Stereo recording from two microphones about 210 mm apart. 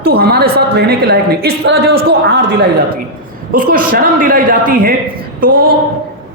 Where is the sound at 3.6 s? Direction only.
40° right (ahead or behind).